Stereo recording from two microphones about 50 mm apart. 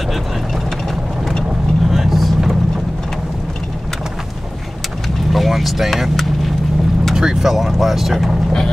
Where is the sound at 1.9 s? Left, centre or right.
Centre.